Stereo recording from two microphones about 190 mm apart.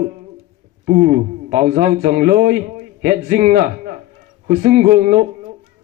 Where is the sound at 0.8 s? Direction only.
45° right (ahead or behind).